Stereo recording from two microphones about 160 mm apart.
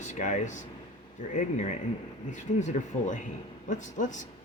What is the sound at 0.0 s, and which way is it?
Speech, 50° left (ahead or behind).